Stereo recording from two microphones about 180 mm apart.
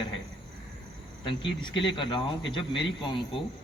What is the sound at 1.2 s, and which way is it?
Speech, 25° left (ahead or behind).